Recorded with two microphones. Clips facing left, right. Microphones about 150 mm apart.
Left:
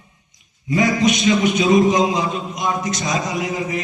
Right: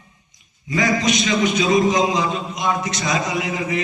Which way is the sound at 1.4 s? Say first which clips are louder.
Left 1 dB; 55° left (ahead or behind).